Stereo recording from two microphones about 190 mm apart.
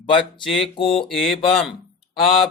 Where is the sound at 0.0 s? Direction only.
25° left (ahead or behind).